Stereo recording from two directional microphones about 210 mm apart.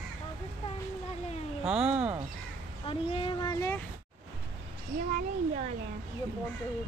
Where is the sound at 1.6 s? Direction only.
5° right (ahead or behind).